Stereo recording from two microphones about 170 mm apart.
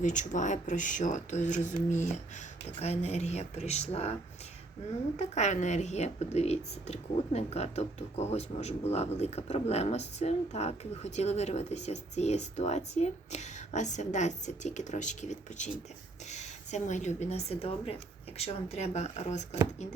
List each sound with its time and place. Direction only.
0.0 s speech: 45° left (ahead or behind)
5.1 s speech: 40° left (ahead or behind)